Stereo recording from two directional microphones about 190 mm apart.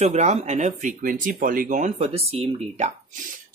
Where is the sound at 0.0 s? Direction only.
35° right (ahead or behind).